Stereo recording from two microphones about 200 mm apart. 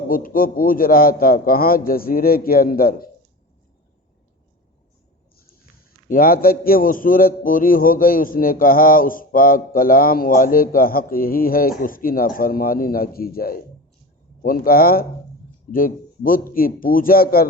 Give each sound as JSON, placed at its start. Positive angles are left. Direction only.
{"t": 0.1, "sound": "a man's voice", "side_deg": 45}
{"t": 6.1, "sound": "a man's voice", "side_deg": 45}